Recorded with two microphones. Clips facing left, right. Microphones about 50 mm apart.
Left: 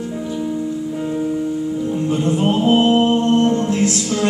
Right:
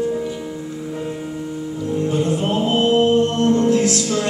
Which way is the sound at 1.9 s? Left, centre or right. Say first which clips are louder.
Right 1 dB; left.